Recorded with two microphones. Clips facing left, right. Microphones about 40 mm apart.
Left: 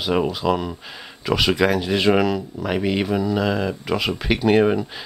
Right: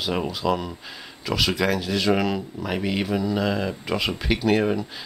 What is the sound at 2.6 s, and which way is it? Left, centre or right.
Speech, centre.